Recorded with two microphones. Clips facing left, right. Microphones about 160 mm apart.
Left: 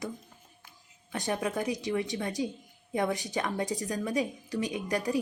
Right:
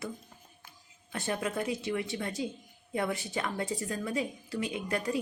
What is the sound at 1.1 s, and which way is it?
Speech, 15° left (ahead or behind).